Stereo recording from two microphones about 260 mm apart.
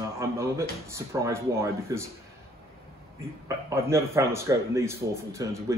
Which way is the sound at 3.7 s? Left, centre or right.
Centre.